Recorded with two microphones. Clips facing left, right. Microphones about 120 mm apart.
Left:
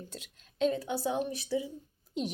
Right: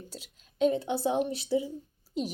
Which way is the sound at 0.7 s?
20° right (ahead or behind).